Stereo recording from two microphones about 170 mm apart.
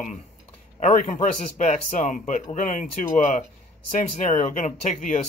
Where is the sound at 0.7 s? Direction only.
45° left (ahead or behind).